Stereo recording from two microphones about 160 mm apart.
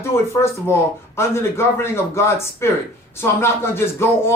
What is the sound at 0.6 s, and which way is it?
Speech, 15° left (ahead or behind).